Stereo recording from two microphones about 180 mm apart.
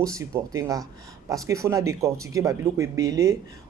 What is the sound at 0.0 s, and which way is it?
Speech, 20° right (ahead or behind).